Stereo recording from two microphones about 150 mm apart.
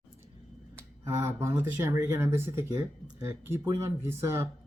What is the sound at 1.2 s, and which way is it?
Speech, 20° right (ahead or behind).